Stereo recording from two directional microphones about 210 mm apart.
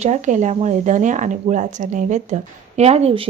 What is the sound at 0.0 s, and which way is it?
Speech, 35° right (ahead or behind).